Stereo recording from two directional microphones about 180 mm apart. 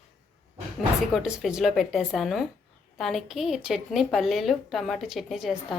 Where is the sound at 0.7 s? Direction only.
Centre (ahead or behind).